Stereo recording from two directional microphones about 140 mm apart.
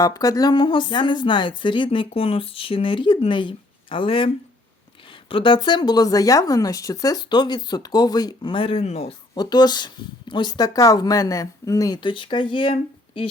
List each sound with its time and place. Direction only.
0.0 s speech: 25° left (ahead or behind)
5.3 s speech: 35° left (ahead or behind)
9.3 s speech: 30° left (ahead or behind)